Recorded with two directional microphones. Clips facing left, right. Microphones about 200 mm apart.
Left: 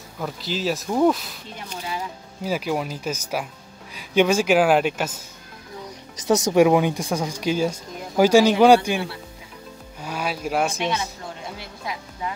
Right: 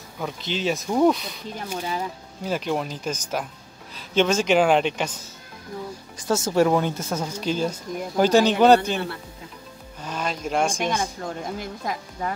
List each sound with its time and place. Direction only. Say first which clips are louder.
0.2 s speech: even; centre (ahead or behind)
6.2 s speech: left 4 dB; 15° left (ahead or behind)
11.4 s speech: right 4 dB; 45° right (ahead or behind)